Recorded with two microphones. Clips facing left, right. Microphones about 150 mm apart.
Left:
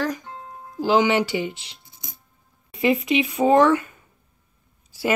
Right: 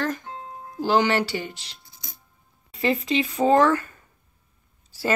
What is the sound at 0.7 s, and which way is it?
Speech, 10° left (ahead or behind).